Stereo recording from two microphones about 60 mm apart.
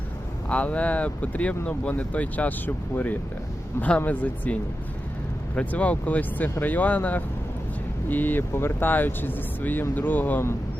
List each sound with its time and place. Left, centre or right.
0.4 s speech: left
5.5 s speech: left